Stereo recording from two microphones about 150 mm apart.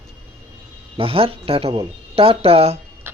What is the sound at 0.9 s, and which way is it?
Speech, 40° right (ahead or behind).